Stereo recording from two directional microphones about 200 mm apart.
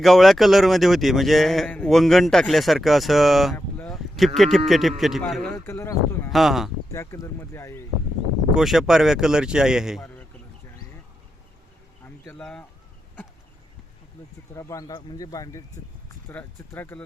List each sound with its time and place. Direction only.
0.0 s a man's voice: centre (ahead or behind)
3.5 s a sound: 5° left (ahead or behind)
4.4 s a man's voice: centre (ahead or behind)
6.3 s a man's voice: centre (ahead or behind)
6.9 s speech: 15° left (ahead or behind)
8.5 s a man's voice: centre (ahead or behind)
12.0 s a sound: 10° left (ahead or behind)
14.5 s speech: 15° left (ahead or behind)